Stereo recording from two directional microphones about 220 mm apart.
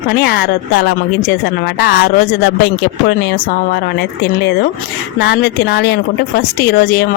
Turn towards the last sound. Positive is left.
turn(degrees=45)  # may be behind; listen again after turning